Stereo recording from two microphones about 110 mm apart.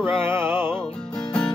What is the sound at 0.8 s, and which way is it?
Music, 5° left (ahead or behind).